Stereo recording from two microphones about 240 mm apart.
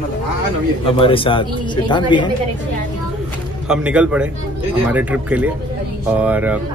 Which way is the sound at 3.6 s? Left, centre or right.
Centre.